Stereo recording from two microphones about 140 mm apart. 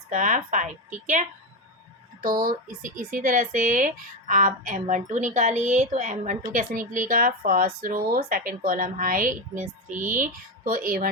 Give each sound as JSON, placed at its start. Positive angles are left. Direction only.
{"t": 0.1, "sound": "a woman's voice", "side_deg": -65}
{"t": 2.2, "sound": "speech", "side_deg": -90}